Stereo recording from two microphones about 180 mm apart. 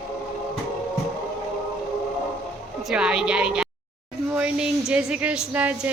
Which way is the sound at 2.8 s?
5° right (ahead or behind).